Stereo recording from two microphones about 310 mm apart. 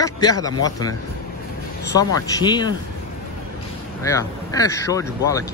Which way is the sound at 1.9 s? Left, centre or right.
Centre.